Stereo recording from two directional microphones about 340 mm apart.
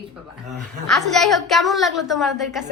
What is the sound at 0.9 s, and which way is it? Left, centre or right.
A woman's voice, centre.